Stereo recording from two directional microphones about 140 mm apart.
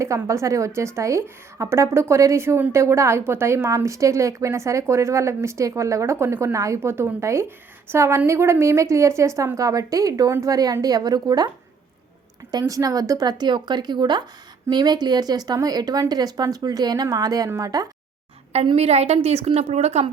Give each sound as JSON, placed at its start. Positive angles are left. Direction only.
{"t": 0.3, "sound": "a woman's voice", "side_deg": -20}
{"t": 12.5, "sound": "a woman's voice", "side_deg": -25}
{"t": 18.5, "sound": "a woman's voice", "side_deg": -45}